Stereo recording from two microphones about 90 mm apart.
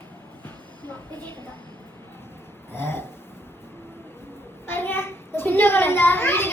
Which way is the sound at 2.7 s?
25° left (ahead or behind).